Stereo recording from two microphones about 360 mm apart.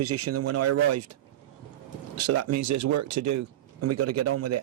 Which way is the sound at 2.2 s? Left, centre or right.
Right.